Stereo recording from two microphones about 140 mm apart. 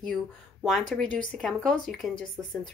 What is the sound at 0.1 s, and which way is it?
A woman's voice, centre (ahead or behind).